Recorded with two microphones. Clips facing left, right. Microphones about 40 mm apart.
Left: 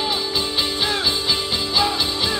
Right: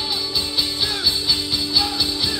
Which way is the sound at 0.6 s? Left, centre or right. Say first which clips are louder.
Left 2 dB; left.